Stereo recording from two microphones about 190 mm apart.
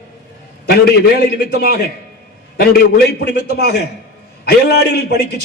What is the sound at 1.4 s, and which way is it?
Speech, 55° left (ahead or behind).